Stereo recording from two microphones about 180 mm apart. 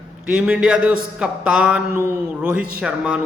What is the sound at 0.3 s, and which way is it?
A man's voice, 5° right (ahead or behind).